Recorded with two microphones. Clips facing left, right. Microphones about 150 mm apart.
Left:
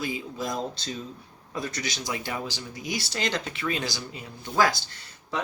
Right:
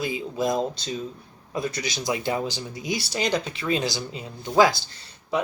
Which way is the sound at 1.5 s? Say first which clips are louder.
Right 4 dB; 15° right (ahead or behind).